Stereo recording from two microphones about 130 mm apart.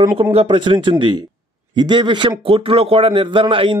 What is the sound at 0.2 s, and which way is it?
Speech, 45° right (ahead or behind).